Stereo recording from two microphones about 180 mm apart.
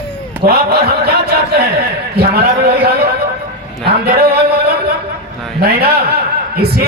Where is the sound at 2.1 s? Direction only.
60° right (ahead or behind).